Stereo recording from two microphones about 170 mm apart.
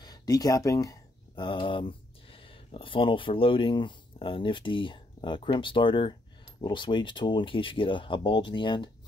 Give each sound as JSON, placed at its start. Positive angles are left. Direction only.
{"t": 0.0, "sound": "speech", "side_deg": 20}